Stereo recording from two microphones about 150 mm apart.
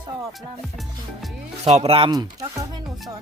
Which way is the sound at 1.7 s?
40° right (ahead or behind).